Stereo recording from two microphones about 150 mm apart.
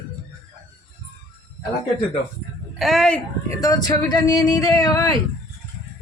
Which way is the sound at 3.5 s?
25° left (ahead or behind).